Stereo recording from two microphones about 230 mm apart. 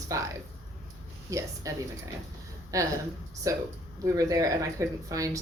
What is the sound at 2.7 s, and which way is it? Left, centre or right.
Speech, centre.